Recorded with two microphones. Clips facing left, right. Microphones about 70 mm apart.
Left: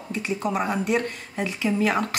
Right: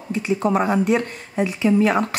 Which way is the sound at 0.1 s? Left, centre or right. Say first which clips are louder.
Right 6 dB; centre.